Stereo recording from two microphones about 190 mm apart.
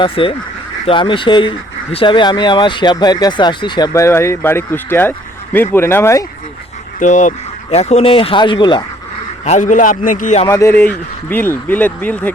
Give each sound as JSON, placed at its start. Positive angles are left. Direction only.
{"t": 0.0, "sound": "speech", "side_deg": 25}
{"t": 7.0, "sound": "speech", "side_deg": 40}
{"t": 9.4, "sound": "a man's voice", "side_deg": 40}
{"t": 10.4, "sound": "speech", "side_deg": 15}